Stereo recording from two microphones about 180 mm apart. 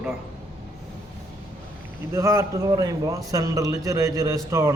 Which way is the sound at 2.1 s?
15° right (ahead or behind).